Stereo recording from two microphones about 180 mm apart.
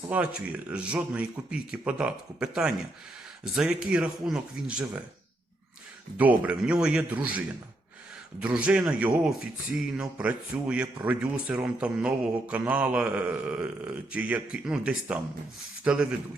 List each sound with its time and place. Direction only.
0.1 s speech: 5° right (ahead or behind)
6.1 s speech: 10° right (ahead or behind)